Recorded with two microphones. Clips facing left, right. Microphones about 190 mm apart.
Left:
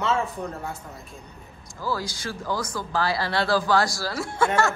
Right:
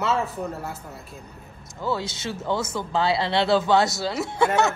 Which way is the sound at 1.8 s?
25° right (ahead or behind).